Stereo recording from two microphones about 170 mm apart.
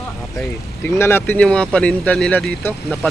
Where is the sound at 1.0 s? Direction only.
15° left (ahead or behind).